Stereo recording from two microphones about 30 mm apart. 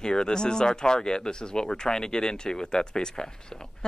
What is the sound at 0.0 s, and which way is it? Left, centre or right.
Speech, left.